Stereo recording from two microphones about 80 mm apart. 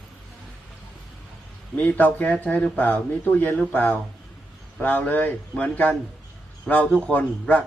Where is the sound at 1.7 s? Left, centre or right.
Left.